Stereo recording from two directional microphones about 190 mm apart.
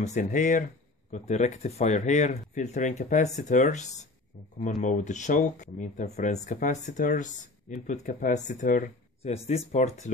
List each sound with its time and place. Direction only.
0.0 s speech: 40° left (ahead or behind)
9.2 s speech: 35° left (ahead or behind)